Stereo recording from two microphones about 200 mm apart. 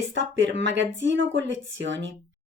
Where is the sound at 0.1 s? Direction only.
65° right (ahead or behind).